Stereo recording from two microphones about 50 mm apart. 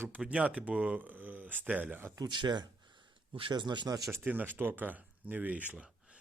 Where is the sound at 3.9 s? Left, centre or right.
Right.